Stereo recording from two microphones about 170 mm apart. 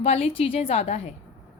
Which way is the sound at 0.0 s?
35° left (ahead or behind).